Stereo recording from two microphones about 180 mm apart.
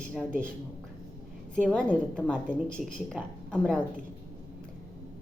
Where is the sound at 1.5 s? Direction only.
5° left (ahead or behind).